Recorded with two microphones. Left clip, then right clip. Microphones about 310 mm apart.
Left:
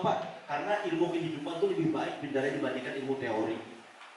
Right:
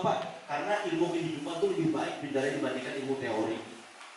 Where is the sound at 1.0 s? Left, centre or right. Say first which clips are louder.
Even; left; by 2.9 s centre.